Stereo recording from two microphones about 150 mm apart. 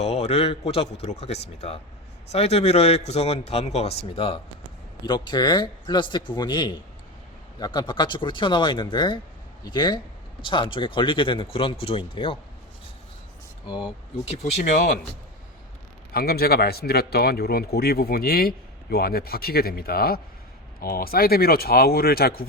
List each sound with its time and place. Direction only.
0.0 s speech: 45° left (ahead or behind)
13.7 s speech: 30° left (ahead or behind)
14.3 s speech: 50° left (ahead or behind)
16.1 s speech: 90° left